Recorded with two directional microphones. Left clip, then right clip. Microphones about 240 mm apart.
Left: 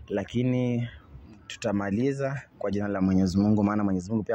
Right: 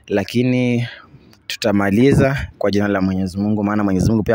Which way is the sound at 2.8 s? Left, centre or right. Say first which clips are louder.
Right 8 dB; right.